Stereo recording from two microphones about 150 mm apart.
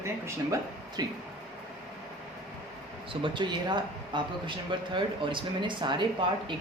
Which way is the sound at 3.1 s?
35° right (ahead or behind).